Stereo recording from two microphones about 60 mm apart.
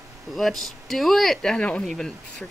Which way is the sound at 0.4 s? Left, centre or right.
Centre.